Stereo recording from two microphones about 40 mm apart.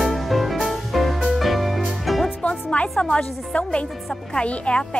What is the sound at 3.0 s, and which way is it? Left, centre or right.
Speech, left.